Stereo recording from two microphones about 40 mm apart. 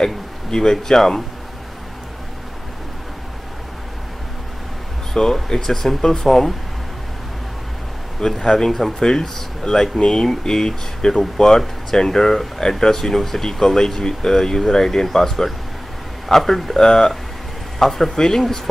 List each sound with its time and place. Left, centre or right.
0.0 s speech: centre
5.1 s speech: centre
8.2 s speech: centre